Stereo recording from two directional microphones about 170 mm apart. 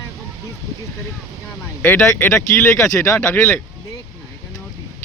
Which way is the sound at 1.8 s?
10° left (ahead or behind).